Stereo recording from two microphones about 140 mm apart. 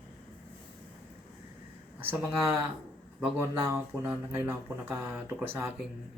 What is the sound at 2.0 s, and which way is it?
Speech, 15° right (ahead or behind).